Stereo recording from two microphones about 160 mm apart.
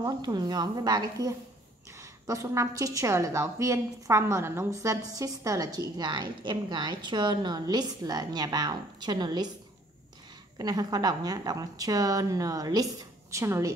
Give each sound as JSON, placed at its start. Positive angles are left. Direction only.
{"t": 0.0, "sound": "a woman's voice", "side_deg": -25}
{"t": 10.6, "sound": "a woman's voice", "side_deg": -25}